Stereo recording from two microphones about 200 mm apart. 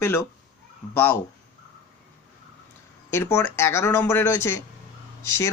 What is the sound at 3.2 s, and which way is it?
Speech, 10° left (ahead or behind).